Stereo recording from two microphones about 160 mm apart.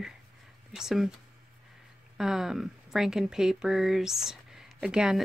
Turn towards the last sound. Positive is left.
turn(degrees=-5)  # may be behind; listen again after turning